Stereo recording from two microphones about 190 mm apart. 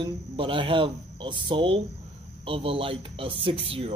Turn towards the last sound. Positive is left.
turn(degrees=-30)  # may be behind; listen again after turning